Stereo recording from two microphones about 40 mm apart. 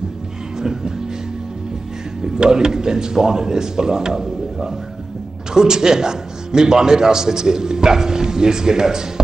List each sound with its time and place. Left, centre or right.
0.6 s music: centre
2.2 s a man's voice: centre